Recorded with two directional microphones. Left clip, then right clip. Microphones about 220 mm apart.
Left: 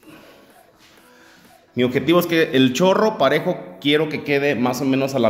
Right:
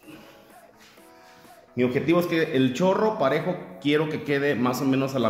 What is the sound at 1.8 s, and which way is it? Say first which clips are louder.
A man's voice: left 5 dB; 20° left (ahead or behind).